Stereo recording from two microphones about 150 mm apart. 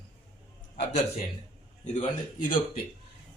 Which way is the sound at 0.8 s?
50° left (ahead or behind).